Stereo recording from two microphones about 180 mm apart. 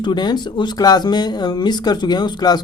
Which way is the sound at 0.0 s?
25° left (ahead or behind).